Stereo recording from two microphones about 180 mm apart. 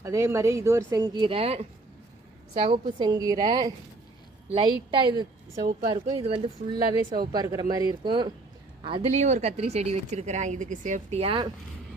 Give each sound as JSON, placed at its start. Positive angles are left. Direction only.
{"t": 0.0, "sound": "speech", "side_deg": -15}
{"t": 2.6, "sound": "a woman's voice", "side_deg": -25}
{"t": 7.3, "sound": "a woman's voice", "side_deg": -20}